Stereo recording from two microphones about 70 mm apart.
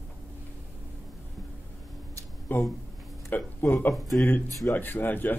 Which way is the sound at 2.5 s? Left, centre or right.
Left.